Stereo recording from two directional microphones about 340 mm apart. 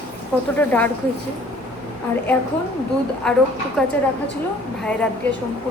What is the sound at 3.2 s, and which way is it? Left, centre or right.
Speech, centre.